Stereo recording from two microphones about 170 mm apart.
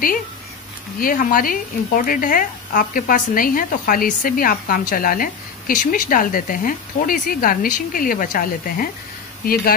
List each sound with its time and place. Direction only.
0.9 s a woman's voice: 55° left (ahead or behind)